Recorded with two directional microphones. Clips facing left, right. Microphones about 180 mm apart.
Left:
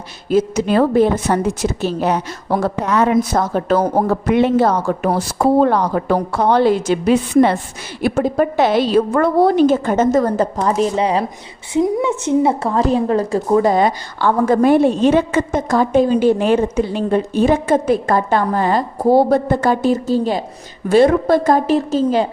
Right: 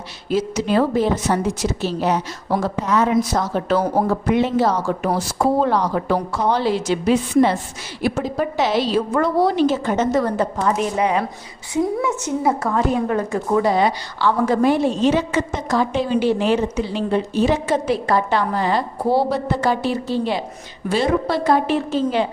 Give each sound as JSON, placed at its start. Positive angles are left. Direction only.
{"t": 0.3, "sound": "a woman's voice", "side_deg": 50}
{"t": 4.3, "sound": "a woman's voice", "side_deg": 60}
{"t": 13.7, "sound": "a woman's voice", "side_deg": 45}